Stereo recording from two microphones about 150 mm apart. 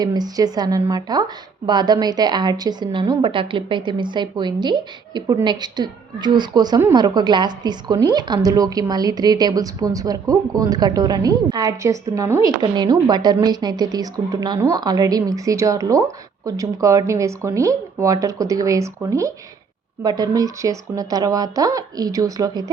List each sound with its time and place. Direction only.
0.0 s a woman's voice: 25° right (ahead or behind)